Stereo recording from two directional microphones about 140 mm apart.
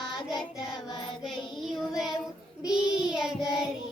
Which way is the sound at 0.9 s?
30° left (ahead or behind).